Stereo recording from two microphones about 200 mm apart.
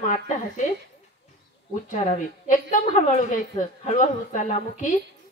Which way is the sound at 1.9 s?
40° left (ahead or behind).